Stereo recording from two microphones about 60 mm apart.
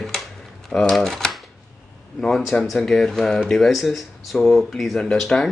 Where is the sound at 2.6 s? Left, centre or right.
Centre.